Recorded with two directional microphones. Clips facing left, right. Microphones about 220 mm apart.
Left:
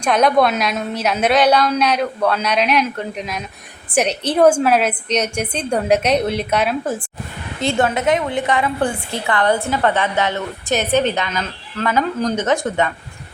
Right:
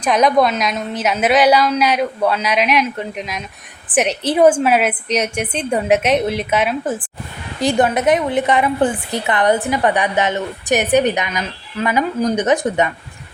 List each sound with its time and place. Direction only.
0.0 s a woman's voice: centre (ahead or behind)
7.6 s a woman's voice: 15° right (ahead or behind)